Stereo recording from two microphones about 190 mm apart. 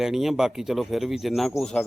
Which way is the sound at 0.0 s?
Centre (ahead or behind).